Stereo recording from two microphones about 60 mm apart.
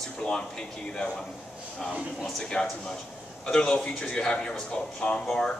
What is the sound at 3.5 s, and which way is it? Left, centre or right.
Speech, centre.